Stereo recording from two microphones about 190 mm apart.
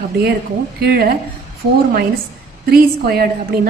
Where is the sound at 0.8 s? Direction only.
55° right (ahead or behind).